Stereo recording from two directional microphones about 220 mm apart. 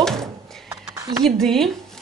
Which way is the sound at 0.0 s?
Centre (ahead or behind).